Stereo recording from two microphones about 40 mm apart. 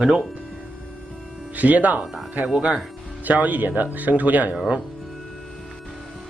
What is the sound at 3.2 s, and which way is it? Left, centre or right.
Speech, right.